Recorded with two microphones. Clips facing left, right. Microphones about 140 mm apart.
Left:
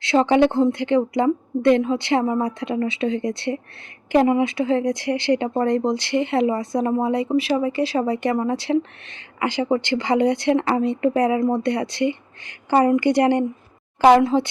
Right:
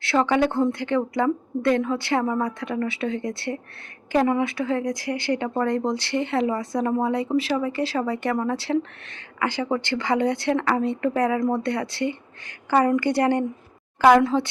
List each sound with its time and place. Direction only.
0.0 s a woman's voice: 20° left (ahead or behind)